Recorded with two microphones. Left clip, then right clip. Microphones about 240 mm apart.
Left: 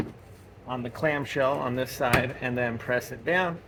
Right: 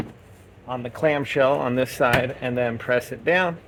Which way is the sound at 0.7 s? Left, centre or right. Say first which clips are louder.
Right 5 dB; right.